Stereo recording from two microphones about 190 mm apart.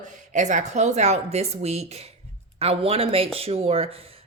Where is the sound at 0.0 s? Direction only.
40° right (ahead or behind).